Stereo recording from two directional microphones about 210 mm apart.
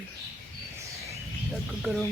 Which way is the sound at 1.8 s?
Centre (ahead or behind).